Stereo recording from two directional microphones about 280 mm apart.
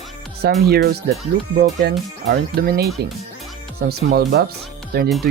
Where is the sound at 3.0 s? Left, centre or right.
Right.